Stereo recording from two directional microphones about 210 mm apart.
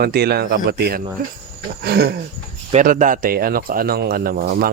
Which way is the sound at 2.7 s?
35° right (ahead or behind).